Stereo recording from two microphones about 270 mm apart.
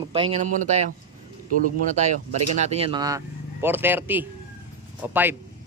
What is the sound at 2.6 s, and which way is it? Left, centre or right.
Speech, right.